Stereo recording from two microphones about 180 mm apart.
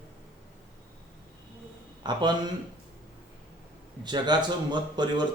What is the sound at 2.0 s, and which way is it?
Speech, 25° right (ahead or behind).